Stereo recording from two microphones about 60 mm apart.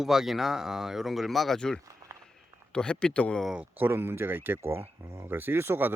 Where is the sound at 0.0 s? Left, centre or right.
Centre.